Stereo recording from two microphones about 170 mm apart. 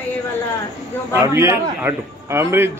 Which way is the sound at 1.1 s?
15° right (ahead or behind).